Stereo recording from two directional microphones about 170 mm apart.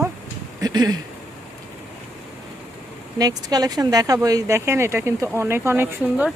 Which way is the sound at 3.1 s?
20° right (ahead or behind).